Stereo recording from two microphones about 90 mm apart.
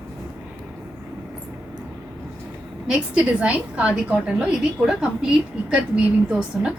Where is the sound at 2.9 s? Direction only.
10° right (ahead or behind).